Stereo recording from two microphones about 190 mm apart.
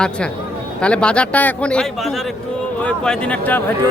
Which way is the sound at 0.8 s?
5° left (ahead or behind).